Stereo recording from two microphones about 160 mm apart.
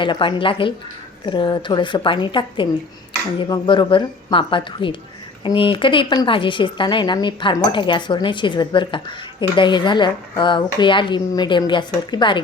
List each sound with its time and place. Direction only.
0.0 s speech: 30° left (ahead or behind)